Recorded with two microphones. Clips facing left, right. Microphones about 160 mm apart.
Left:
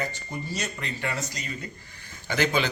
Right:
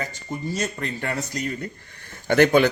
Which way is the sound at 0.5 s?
50° right (ahead or behind).